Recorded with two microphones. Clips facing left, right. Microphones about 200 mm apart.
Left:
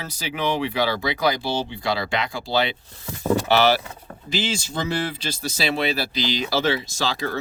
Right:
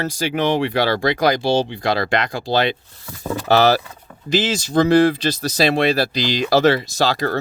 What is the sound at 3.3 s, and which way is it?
Speech, 35° left (ahead or behind).